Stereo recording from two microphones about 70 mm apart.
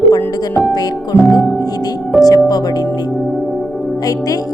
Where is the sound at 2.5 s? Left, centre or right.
Left.